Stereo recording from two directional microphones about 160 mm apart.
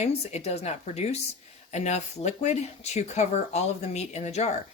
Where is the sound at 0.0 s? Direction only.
40° left (ahead or behind).